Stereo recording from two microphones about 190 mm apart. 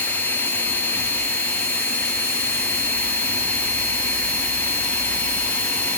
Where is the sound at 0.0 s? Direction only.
10° left (ahead or behind).